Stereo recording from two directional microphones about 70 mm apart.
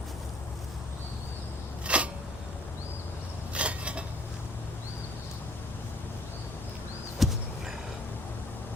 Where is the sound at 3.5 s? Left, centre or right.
Centre.